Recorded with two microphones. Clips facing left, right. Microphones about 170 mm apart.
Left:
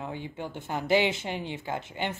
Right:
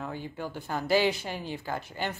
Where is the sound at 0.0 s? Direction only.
20° left (ahead or behind).